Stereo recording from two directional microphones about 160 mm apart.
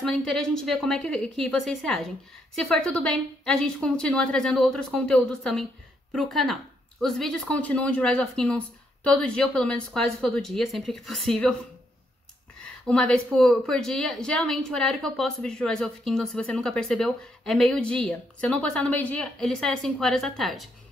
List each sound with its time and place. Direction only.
0.0 s a woman's voice: 5° left (ahead or behind)
12.8 s a woman's voice: 5° left (ahead or behind)